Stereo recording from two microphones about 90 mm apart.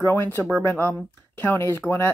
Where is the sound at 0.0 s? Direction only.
20° left (ahead or behind).